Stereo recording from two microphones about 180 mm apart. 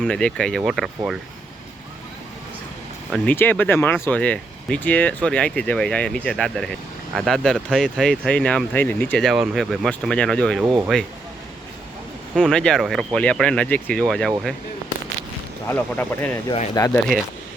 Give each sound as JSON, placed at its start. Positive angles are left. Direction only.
{"t": 0.0, "sound": "speech", "side_deg": 5}
{"t": 3.1, "sound": "speech", "side_deg": 10}
{"t": 10.6, "sound": "speech", "side_deg": -10}
{"t": 12.3, "sound": "speech", "side_deg": 5}
{"t": 15.7, "sound": "speech", "side_deg": 10}